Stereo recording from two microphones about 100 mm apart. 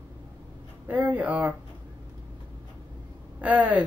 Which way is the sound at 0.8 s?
15° right (ahead or behind).